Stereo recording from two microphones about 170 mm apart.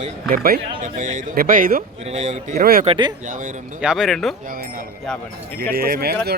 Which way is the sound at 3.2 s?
50° right (ahead or behind).